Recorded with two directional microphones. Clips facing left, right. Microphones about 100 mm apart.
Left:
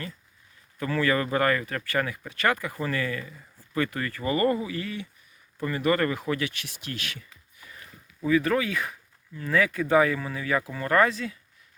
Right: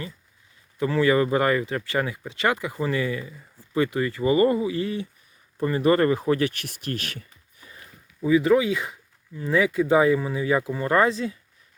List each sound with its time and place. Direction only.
0.8 s speech: 20° right (ahead or behind); by 7.7 s 40° right (ahead or behind)
8.2 s speech: 15° right (ahead or behind)